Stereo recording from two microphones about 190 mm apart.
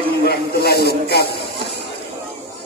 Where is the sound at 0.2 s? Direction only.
55° left (ahead or behind).